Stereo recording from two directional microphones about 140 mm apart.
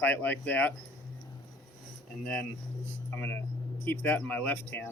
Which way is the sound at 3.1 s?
15° left (ahead or behind).